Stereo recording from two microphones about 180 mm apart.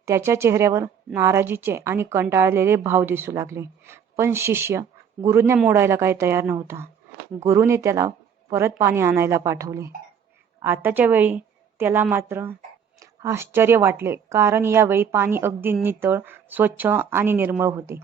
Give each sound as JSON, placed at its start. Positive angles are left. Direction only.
{"t": 0.0, "sound": "a woman's voice", "side_deg": -15}